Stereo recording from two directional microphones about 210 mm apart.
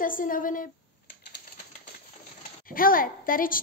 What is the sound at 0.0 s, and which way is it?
Speech, 40° left (ahead or behind).